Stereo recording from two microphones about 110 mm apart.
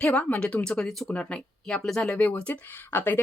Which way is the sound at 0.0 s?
10° left (ahead or behind).